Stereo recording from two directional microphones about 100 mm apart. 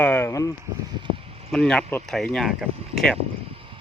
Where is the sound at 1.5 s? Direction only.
10° left (ahead or behind).